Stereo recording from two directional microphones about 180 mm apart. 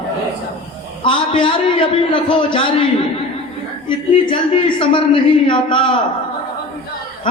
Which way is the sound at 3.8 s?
25° left (ahead or behind).